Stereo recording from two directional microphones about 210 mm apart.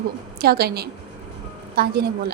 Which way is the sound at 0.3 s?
50° right (ahead or behind).